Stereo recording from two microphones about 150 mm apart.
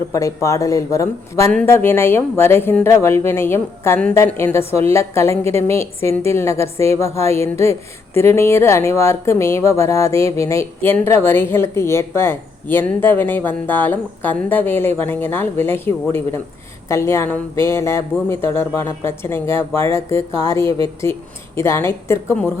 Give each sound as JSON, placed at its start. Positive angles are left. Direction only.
{"t": 0.1, "sound": "a woman's voice", "side_deg": 20}